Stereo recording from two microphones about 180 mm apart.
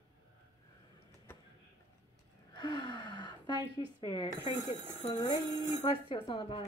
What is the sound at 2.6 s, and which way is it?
Speech, 25° left (ahead or behind).